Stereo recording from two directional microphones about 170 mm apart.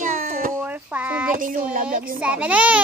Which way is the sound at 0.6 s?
10° right (ahead or behind).